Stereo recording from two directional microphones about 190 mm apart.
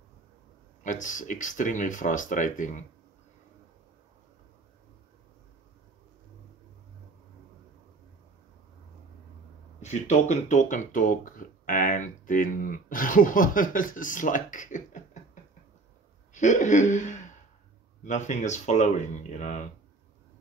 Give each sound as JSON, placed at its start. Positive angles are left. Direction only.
{"t": 0.8, "sound": "speech", "side_deg": 40}
{"t": 9.8, "sound": "speech", "side_deg": 35}
{"t": 16.3, "sound": "speech", "side_deg": 40}